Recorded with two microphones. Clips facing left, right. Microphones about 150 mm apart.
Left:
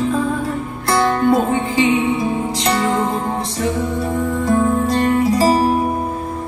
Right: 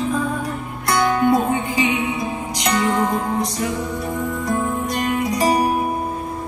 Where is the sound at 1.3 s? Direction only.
30° left (ahead or behind).